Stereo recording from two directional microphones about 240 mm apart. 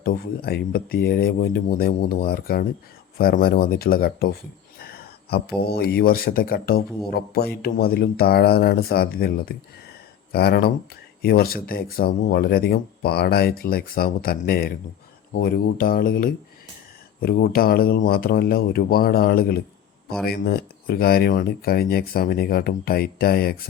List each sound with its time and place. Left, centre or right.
0.0 s speech: left
4.8 s a sound: left
5.5 s speech: left